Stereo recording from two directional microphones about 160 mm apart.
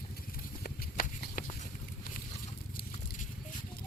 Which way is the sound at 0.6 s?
65° left (ahead or behind).